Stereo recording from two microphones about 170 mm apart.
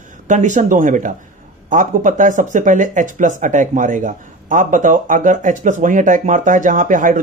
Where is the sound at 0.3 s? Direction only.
45° right (ahead or behind).